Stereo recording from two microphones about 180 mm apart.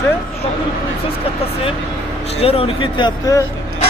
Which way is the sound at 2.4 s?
30° left (ahead or behind).